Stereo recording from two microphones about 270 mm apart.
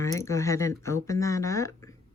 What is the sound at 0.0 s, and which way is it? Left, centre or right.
Speech, centre.